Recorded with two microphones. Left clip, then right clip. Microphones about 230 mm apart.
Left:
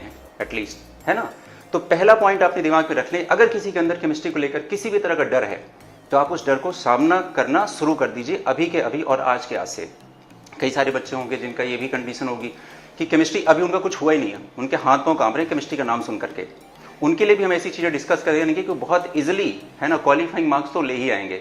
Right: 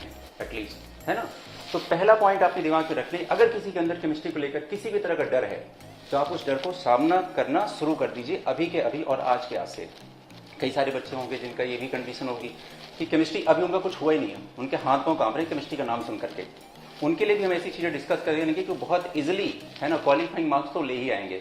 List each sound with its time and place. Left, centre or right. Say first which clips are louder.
1.1 s speech: left 7 dB; left
10.6 s speech: left 6 dB; left